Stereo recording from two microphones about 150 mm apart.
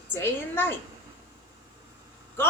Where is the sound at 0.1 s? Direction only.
15° left (ahead or behind).